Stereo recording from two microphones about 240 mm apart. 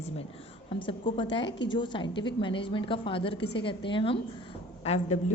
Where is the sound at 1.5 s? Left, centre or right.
Left.